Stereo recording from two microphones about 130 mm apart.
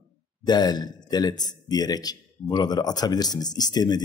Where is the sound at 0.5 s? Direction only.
35° left (ahead or behind).